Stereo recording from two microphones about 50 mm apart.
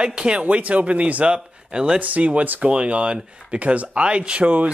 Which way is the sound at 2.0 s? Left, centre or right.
Right.